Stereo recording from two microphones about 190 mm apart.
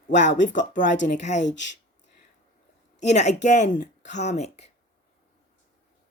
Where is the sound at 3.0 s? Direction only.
35° left (ahead or behind).